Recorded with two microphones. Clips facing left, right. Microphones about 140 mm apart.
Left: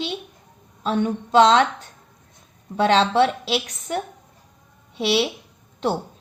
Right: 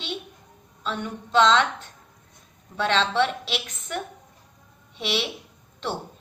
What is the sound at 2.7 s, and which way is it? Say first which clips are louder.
A woman's voice: left 6 dB; 40° left (ahead or behind).